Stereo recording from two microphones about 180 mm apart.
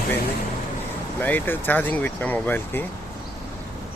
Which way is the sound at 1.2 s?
10° left (ahead or behind).